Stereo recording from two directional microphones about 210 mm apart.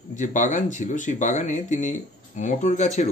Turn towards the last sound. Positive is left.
turn(degrees=35)  # may be behind; listen again after turning